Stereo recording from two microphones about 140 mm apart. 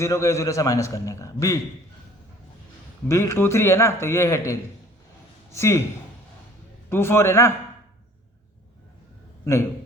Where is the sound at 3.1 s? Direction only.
20° left (ahead or behind).